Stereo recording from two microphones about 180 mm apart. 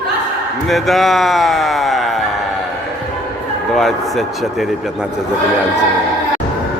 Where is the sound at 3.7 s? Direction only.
Centre (ahead or behind).